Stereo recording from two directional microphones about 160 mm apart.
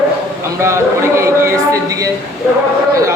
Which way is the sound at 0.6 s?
15° right (ahead or behind).